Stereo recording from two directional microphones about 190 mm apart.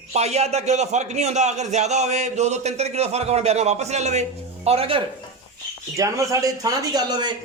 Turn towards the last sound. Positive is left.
turn(degrees=-20)  # may be behind; listen again after turning